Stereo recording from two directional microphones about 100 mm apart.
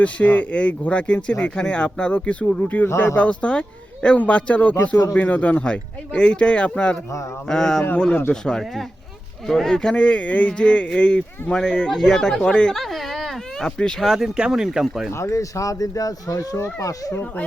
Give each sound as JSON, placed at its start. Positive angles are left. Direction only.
{"t": 0.0, "sound": "speech", "side_deg": 15}
{"t": 15.1, "sound": "speech", "side_deg": 30}